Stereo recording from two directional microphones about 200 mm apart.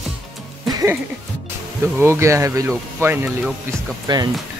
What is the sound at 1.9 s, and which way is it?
Speech, 10° right (ahead or behind).